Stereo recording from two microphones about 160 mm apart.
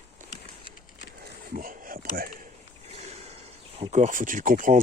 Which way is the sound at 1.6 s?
60° right (ahead or behind).